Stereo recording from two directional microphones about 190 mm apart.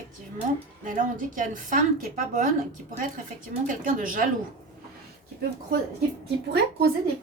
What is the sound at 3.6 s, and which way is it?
Speech, 45° right (ahead or behind).